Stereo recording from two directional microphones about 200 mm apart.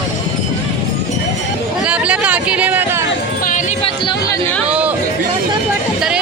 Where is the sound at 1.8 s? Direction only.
5° right (ahead or behind).